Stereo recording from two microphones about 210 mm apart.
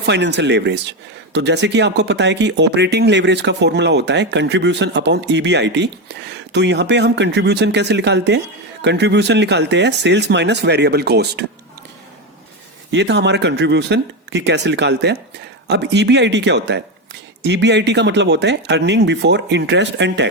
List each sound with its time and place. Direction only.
0.0 s speech: 55° right (ahead or behind)
12.9 s speech: 55° right (ahead or behind)